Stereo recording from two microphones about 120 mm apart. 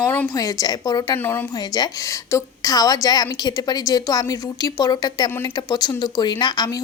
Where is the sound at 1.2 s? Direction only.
20° left (ahead or behind).